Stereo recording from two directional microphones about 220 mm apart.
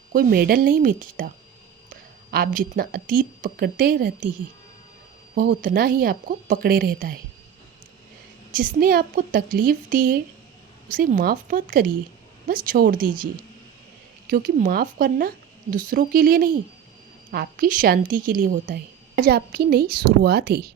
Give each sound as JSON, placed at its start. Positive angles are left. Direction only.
{"t": 0.1, "sound": "speech", "side_deg": -40}
{"t": 5.3, "sound": "speech", "side_deg": -40}
{"t": 8.5, "sound": "a woman's voice", "side_deg": -40}